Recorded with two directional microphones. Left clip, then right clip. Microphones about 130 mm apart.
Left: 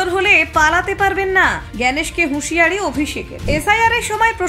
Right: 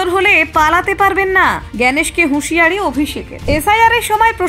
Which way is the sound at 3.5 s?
50° right (ahead or behind).